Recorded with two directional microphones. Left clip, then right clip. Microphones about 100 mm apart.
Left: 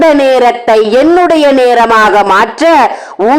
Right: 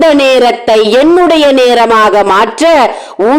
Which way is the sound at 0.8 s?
20° right (ahead or behind).